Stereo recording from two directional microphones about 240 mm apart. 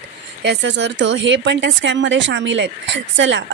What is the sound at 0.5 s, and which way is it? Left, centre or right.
Speech, right.